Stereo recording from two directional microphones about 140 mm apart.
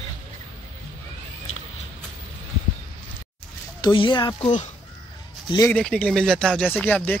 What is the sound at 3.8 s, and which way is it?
Speech, 35° left (ahead or behind).